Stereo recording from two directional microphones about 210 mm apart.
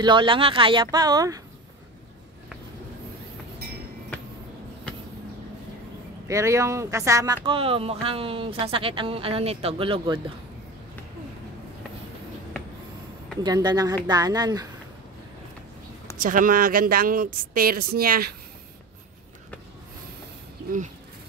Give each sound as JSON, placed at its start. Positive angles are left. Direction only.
{"t": 0.0, "sound": "speech", "side_deg": -25}
{"t": 6.2, "sound": "speech", "side_deg": -15}
{"t": 7.4, "sound": "speech", "side_deg": -25}
{"t": 13.4, "sound": "speech", "side_deg": -20}
{"t": 16.2, "sound": "speech", "side_deg": -40}